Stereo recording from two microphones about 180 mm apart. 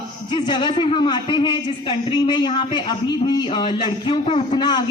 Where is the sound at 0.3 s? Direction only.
25° left (ahead or behind).